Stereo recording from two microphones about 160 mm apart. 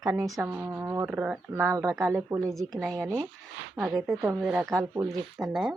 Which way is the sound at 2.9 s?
20° right (ahead or behind).